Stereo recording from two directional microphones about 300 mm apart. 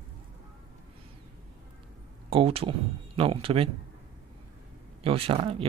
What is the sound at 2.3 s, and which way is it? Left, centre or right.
Speech, centre.